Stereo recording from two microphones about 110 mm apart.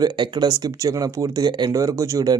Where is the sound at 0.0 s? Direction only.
40° right (ahead or behind).